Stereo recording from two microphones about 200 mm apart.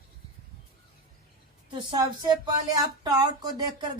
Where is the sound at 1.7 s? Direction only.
25° right (ahead or behind).